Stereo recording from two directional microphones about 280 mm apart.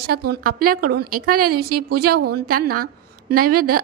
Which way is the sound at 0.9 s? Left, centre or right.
Right.